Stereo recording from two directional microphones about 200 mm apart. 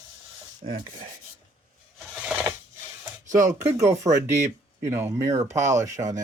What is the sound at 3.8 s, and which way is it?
Speech, 35° right (ahead or behind).